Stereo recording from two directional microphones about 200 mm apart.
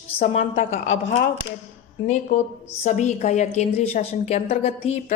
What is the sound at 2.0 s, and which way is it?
A woman's voice, 35° left (ahead or behind).